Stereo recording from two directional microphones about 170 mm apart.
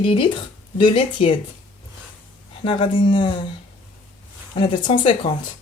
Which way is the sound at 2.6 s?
30° left (ahead or behind).